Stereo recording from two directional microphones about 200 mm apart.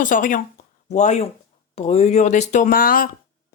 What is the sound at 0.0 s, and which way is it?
Speech, 40° left (ahead or behind).